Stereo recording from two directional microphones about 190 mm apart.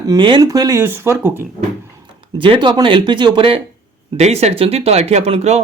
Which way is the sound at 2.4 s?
25° right (ahead or behind).